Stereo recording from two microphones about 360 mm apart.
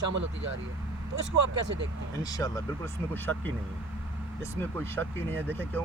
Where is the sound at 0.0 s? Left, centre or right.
Right.